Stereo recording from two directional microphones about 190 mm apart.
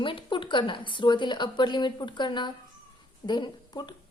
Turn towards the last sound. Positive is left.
turn(degrees=25)  # may be behind; listen again after turning